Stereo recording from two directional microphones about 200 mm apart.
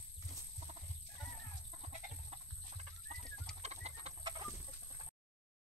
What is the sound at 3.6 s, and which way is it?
Bird, 30° right (ahead or behind).